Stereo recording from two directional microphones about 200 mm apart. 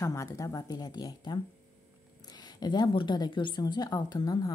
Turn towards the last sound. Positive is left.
turn(degrees=20)  # may be behind; listen again after turning